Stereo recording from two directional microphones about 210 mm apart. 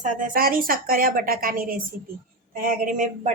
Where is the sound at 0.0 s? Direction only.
40° right (ahead or behind).